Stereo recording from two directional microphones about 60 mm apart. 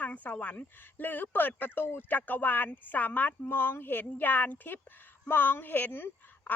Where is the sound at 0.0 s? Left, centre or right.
Left.